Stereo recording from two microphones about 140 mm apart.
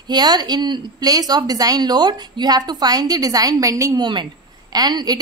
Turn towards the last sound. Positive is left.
turn(degrees=-30)  # may be behind; listen again after turning